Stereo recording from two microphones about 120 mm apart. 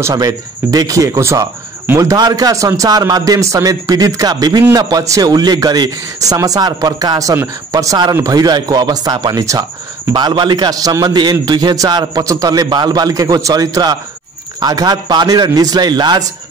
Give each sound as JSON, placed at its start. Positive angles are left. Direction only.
{"t": 0.0, "sound": "speech", "side_deg": -30}